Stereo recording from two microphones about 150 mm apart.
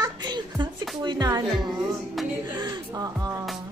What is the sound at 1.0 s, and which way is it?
Speech, 25° right (ahead or behind).